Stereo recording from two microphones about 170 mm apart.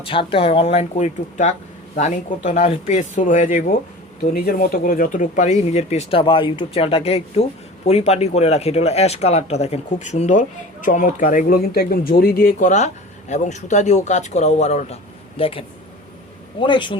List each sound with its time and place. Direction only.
0.0 s a man's voice: 30° left (ahead or behind)